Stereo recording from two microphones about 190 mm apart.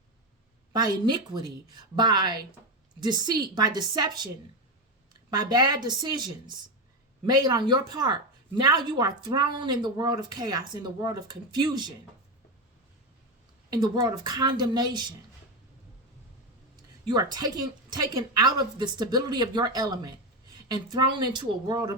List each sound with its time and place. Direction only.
0.7 s speech: 25° right (ahead or behind)
5.3 s speech: 20° right (ahead or behind)
13.7 s speech: 20° right (ahead or behind)
17.3 s speech: 20° right (ahead or behind)